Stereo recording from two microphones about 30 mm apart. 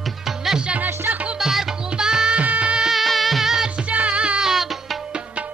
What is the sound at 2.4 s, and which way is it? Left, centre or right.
Music, right.